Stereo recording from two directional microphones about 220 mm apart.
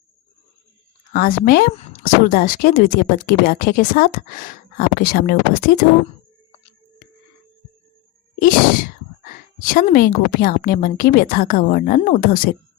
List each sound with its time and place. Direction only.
1.1 s speech: 40° left (ahead or behind)
8.4 s speech: 40° left (ahead or behind)